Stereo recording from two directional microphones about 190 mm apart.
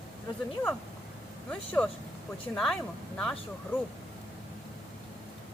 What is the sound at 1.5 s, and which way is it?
Speech, 5° left (ahead or behind).